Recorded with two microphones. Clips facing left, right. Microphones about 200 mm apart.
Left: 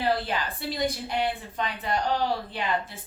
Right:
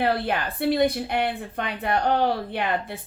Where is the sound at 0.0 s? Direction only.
60° right (ahead or behind).